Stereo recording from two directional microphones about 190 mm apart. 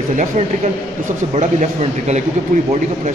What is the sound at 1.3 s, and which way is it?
Speech, 35° right (ahead or behind).